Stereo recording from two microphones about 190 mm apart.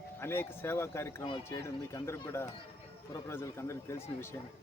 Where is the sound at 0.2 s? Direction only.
10° left (ahead or behind).